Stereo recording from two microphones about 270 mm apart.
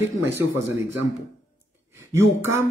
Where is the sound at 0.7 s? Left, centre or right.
Centre.